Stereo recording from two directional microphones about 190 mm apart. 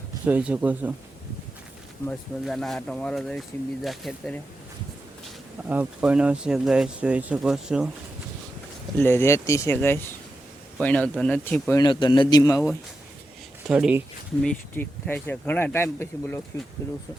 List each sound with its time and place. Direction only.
0.3 s speech: 10° right (ahead or behind)
2.0 s speech: centre (ahead or behind)
5.6 s speech: 10° right (ahead or behind)
9.0 s speech: 15° left (ahead or behind)
11.8 s a man's voice: 25° left (ahead or behind)
13.7 s speech: 5° right (ahead or behind)
14.4 s speech: 10° left (ahead or behind)